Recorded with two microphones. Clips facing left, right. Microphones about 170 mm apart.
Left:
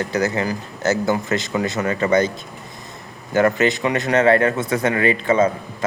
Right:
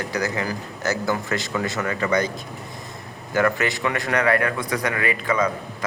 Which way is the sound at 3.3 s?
20° left (ahead or behind).